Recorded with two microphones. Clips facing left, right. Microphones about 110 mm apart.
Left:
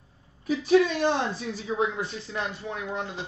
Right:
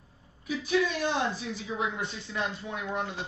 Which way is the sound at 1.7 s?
40° left (ahead or behind).